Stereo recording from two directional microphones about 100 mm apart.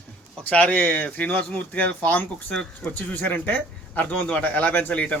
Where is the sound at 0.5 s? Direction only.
15° left (ahead or behind).